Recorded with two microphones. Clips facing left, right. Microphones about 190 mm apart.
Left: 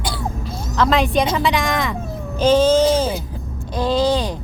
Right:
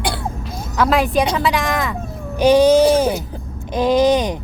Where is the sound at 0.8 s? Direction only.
10° right (ahead or behind).